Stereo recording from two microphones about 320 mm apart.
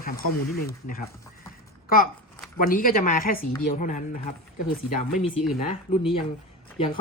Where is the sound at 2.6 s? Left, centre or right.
Left.